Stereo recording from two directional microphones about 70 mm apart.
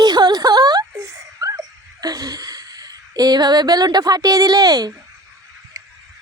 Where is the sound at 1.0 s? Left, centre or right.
Right.